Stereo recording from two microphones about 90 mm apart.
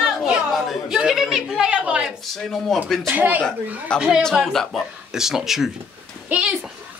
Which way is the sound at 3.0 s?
20° right (ahead or behind).